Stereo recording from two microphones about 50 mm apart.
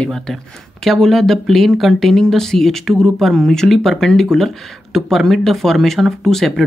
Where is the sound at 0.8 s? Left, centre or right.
Centre.